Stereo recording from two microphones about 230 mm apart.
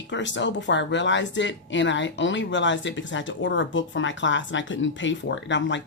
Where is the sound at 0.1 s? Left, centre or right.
Left.